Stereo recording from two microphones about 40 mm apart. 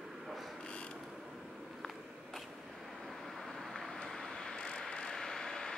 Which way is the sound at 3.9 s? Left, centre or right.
Centre.